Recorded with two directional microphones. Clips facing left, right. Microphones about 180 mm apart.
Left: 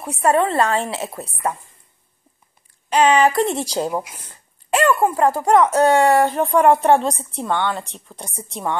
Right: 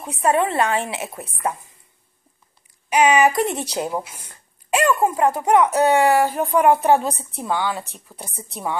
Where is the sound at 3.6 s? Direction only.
35° left (ahead or behind).